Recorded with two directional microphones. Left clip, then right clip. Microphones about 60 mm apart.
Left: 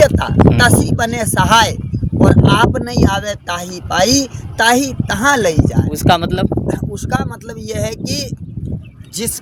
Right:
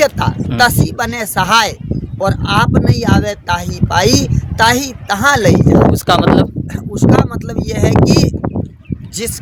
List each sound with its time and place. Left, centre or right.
0.2 s speech: right
2.1 s speech: right
5.9 s speech: right